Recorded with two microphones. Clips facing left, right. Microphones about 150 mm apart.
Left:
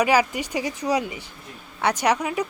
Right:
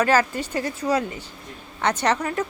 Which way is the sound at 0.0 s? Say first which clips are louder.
Even; 15° left (ahead or behind).